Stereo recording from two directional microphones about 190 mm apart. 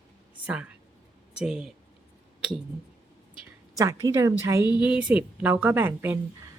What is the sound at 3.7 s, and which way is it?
A woman's voice, 15° right (ahead or behind).